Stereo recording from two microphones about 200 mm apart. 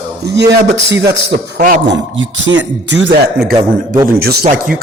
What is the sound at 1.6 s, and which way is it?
Speech, 40° right (ahead or behind).